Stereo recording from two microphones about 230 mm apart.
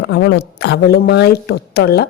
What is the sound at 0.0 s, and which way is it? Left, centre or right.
A woman's voice, left.